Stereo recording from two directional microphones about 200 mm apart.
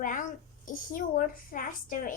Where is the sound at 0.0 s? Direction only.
40° left (ahead or behind).